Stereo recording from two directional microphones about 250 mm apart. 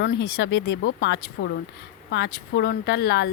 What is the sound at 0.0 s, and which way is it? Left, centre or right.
A woman's voice, left.